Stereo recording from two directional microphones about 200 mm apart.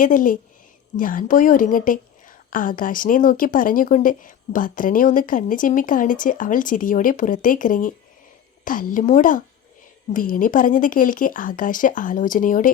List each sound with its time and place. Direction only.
0.0 s a woman's voice: 40° left (ahead or behind)